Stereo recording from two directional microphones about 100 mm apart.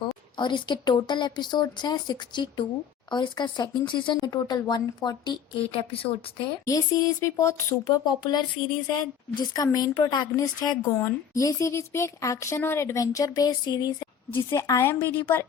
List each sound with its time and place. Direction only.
0.3 s speech: 50° left (ahead or behind)
5.5 s speech: 70° left (ahead or behind)
6.7 s a woman's voice: 35° left (ahead or behind)
7.9 s a woman's voice: 45° left (ahead or behind)
10.3 s a woman's voice: 35° left (ahead or behind)
14.7 s a woman's voice: 25° left (ahead or behind)